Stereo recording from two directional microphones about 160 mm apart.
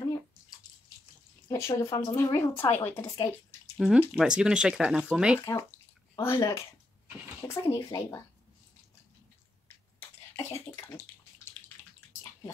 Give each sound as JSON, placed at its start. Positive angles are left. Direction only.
{"t": 1.5, "sound": "speech", "side_deg": 20}
{"t": 3.7, "sound": "speech", "side_deg": -5}
{"t": 5.4, "sound": "speech", "side_deg": 20}